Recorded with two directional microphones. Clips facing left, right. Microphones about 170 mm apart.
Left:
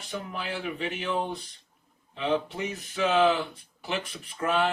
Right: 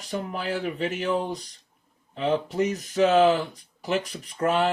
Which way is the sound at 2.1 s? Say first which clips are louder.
Right 4 dB; 40° right (ahead or behind).